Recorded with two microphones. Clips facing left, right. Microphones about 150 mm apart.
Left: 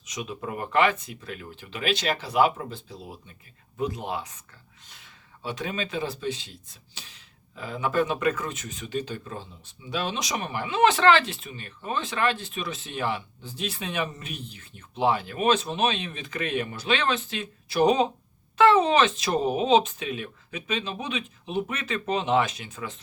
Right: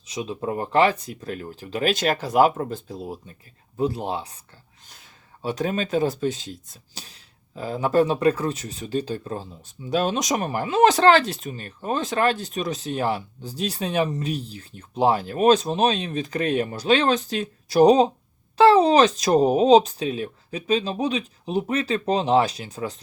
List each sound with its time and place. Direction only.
0.0 s speech: 30° right (ahead or behind); by 3.2 s 45° right (ahead or behind)
3.8 s speech: 30° right (ahead or behind)